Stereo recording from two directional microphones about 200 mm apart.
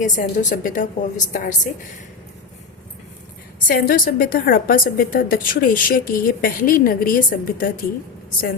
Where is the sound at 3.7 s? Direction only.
45° left (ahead or behind).